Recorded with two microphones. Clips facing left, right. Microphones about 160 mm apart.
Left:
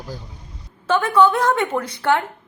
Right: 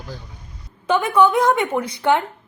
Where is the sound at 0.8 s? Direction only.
15° right (ahead or behind).